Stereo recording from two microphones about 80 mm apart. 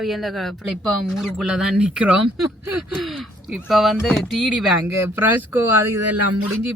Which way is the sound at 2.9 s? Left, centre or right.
Centre.